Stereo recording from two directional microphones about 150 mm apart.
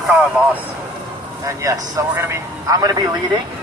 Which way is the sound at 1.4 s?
20° right (ahead or behind).